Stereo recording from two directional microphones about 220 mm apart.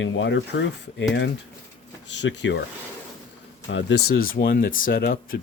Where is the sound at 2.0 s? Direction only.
55° left (ahead or behind).